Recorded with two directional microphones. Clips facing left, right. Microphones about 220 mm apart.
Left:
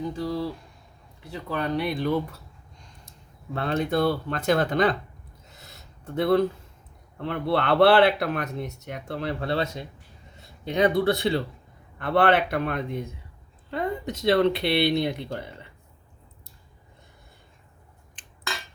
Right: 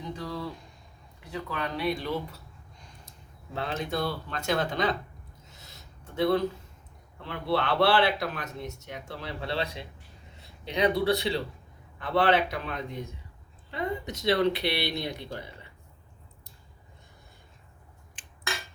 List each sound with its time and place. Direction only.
0.2 s speech: 35° left (ahead or behind)
3.5 s speech: 55° left (ahead or behind)
6.1 s speech: 55° left (ahead or behind)